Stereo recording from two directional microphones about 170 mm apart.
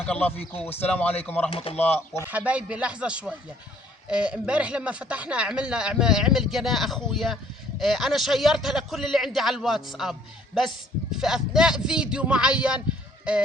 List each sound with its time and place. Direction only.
0.0 s speech: 5° left (ahead or behind)
1.5 s speech: 35° left (ahead or behind)
1.7 s speech: 10° left (ahead or behind)
2.2 s speech: 10° right (ahead or behind)